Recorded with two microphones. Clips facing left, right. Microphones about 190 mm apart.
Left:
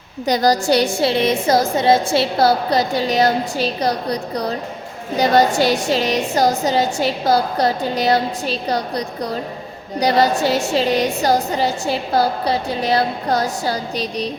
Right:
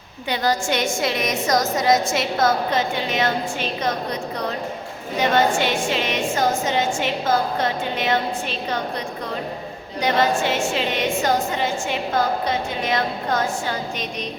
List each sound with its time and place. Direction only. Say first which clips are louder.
0.3 s a woman's voice: left 6 dB; 40° left (ahead or behind)